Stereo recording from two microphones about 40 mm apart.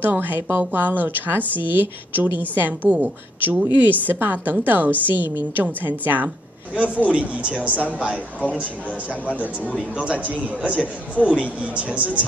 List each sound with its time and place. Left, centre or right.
0.0 s a woman's voice: right
0.4 s a woman's voice: right
0.7 s a woman's voice: right
7.1 s speech: right
9.8 s speech: right
10.2 s speech: right